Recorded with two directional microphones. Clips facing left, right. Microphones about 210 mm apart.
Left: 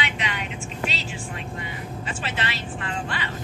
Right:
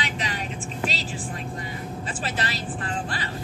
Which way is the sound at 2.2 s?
40° right (ahead or behind).